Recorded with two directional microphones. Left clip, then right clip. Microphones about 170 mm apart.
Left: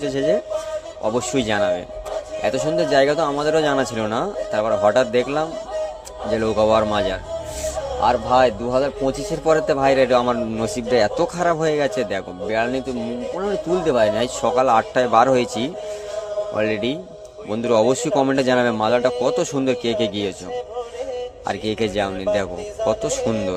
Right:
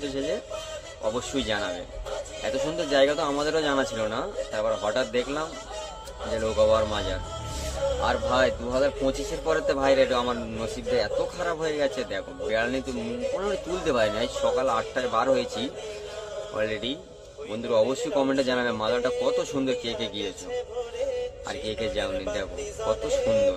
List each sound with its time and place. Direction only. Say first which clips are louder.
0.0 s a man's voice: left 10 dB; 40° left (ahead or behind)
8.0 s a man's voice: left 9 dB; 35° left (ahead or behind)
21.4 s a man's voice: left 7 dB; 45° left (ahead or behind)